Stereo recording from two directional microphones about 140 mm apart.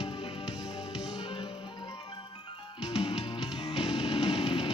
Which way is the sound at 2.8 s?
45° left (ahead or behind).